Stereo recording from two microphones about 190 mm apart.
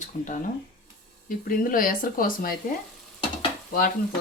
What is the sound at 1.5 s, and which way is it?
Frying, 50° left (ahead or behind).